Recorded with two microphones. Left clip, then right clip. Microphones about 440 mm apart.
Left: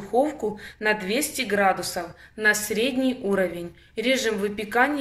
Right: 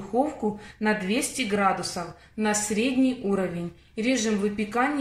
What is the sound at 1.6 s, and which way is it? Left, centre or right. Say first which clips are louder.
A woman's voice: left 3 dB; centre.